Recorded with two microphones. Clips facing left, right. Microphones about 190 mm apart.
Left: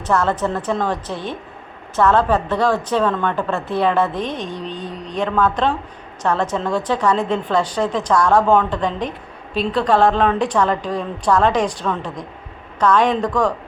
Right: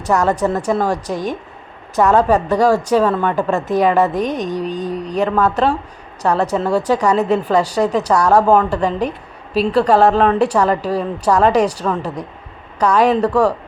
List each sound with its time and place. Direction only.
0.0 s a woman's voice: 15° right (ahead or behind)
3.9 s mantra: 40° right (ahead or behind)
4.9 s a woman's voice: 10° right (ahead or behind)